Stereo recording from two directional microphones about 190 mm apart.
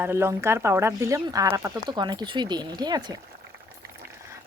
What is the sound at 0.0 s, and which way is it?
Speech, 15° right (ahead or behind).